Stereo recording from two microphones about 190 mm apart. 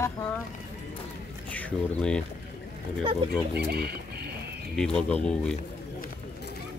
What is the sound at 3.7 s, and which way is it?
Speech, 55° right (ahead or behind).